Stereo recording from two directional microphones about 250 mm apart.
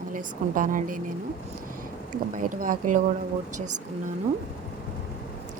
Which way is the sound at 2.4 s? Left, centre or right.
Right.